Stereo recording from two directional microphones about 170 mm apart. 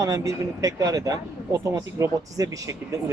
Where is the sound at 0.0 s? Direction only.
20° right (ahead or behind).